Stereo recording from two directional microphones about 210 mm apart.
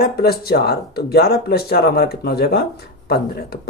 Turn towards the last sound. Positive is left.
turn(degrees=45)  # may be behind; listen again after turning